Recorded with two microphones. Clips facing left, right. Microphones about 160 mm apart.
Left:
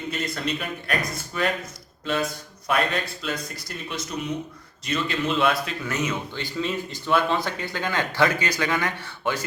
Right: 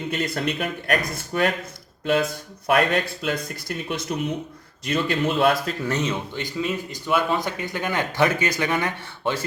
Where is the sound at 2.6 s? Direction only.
55° right (ahead or behind).